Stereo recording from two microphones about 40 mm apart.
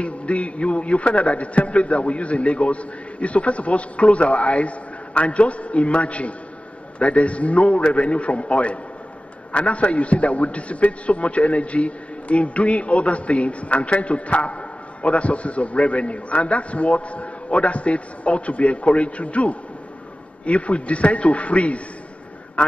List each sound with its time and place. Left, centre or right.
0.0 s a man's voice: left